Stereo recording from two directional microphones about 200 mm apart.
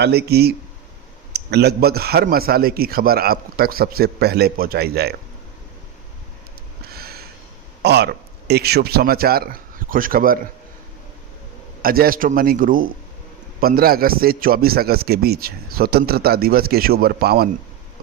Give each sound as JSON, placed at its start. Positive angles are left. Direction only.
{"t": 0.0, "sound": "a man's voice", "side_deg": -55}
{"t": 6.8, "sound": "a sound", "side_deg": -50}
{"t": 7.8, "sound": "speech", "side_deg": -55}
{"t": 11.8, "sound": "a man's voice", "side_deg": -45}